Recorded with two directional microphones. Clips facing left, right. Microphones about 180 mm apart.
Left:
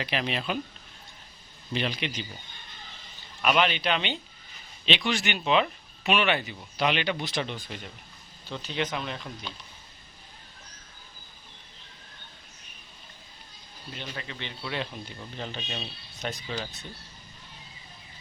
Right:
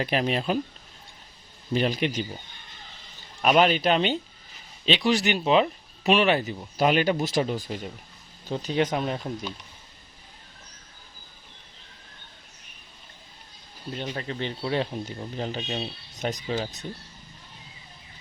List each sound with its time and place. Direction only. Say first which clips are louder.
0.0 s speech: right 5 dB; 45° right (ahead or behind)
1.7 s speech: right 6 dB; 45° right (ahead or behind)
3.4 s speech: right 5 dB; 40° right (ahead or behind)
13.9 s speech: right 7 dB; 40° right (ahead or behind)